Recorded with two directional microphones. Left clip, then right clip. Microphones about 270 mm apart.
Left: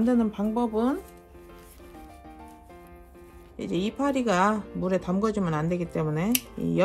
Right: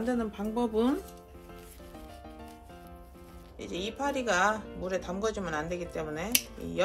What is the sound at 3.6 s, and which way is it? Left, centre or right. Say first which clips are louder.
Speech: left 6 dB; left.